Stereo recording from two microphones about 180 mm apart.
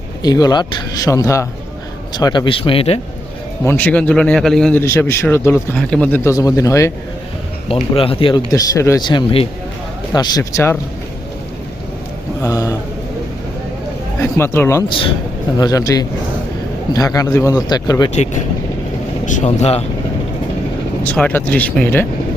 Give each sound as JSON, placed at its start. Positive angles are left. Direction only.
{"t": 0.2, "sound": "speech", "side_deg": 20}
{"t": 3.6, "sound": "a man's voice", "side_deg": 10}
{"t": 7.7, "sound": "speech", "side_deg": 30}
{"t": 12.4, "sound": "speech", "side_deg": 20}
{"t": 14.2, "sound": "a man's voice", "side_deg": 15}
{"t": 14.8, "sound": "speech", "side_deg": 30}
{"t": 19.2, "sound": "speech", "side_deg": 40}
{"t": 21.1, "sound": "a man's voice", "side_deg": 10}